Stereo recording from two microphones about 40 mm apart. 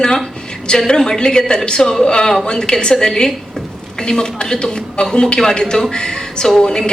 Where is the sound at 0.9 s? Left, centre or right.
Centre.